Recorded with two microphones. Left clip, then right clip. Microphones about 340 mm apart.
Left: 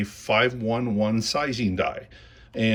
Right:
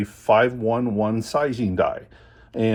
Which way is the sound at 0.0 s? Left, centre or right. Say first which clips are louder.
Right 4 dB; centre.